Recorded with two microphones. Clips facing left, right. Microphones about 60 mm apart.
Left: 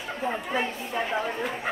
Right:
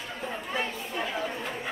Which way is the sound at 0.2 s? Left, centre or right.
Left.